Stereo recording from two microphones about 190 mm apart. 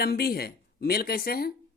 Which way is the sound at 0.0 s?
55° left (ahead or behind).